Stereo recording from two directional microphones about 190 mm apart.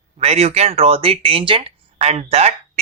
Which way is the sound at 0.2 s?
35° right (ahead or behind).